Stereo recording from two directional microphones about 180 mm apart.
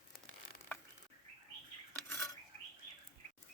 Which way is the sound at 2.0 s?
10° left (ahead or behind).